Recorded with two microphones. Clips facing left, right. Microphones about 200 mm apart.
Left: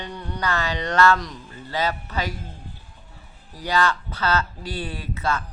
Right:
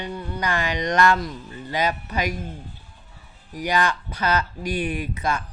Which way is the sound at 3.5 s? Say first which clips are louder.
Even; 15° right (ahead or behind).